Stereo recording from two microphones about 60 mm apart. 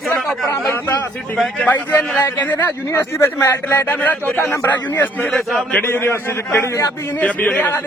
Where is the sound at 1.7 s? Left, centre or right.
Left.